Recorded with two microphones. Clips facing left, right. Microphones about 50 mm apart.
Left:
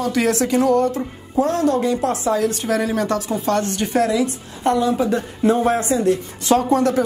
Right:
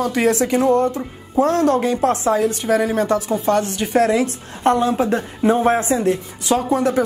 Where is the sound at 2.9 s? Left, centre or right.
Right.